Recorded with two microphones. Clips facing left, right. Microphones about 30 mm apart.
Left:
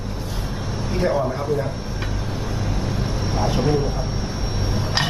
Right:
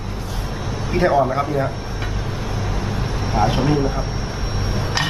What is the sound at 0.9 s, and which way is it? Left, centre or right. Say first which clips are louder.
Speech: right 5 dB; right.